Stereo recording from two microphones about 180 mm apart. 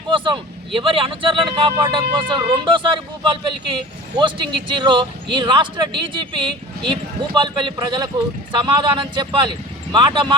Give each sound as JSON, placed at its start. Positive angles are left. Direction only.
{"t": 0.7, "sound": "speech", "side_deg": -30}